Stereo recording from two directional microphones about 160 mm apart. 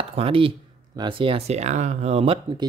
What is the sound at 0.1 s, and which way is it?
Speech, 35° right (ahead or behind).